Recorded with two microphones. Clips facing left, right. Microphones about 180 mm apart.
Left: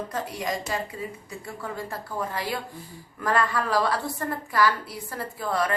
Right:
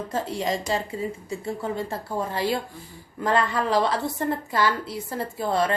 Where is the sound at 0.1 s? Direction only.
25° right (ahead or behind).